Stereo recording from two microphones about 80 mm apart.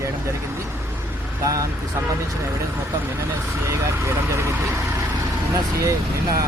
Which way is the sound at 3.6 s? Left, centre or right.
Right.